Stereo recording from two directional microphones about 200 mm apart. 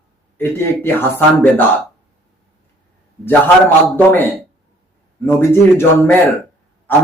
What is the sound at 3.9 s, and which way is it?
Speech, 10° left (ahead or behind).